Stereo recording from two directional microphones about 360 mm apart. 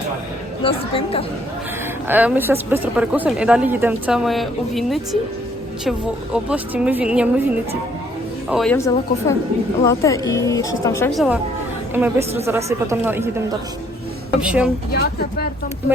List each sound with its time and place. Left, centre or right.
0.6 s a woman's voice: centre
2.0 s a woman's voice: centre
6.3 s a woman's voice: centre
8.4 s a woman's voice: centre
14.4 s a woman's voice: centre
14.9 s speech: left